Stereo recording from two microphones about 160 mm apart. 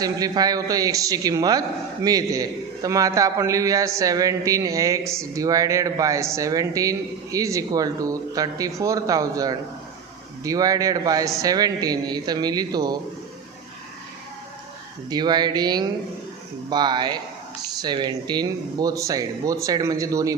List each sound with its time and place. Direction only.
0.0 s speech: 25° right (ahead or behind)
15.1 s speech: 25° right (ahead or behind)